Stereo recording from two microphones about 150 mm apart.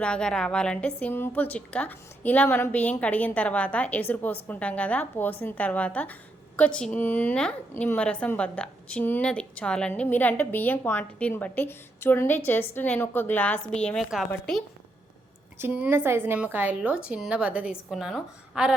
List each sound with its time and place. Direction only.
0.0 s a woman's voice: 5° left (ahead or behind)
15.5 s a woman's voice: 10° right (ahead or behind)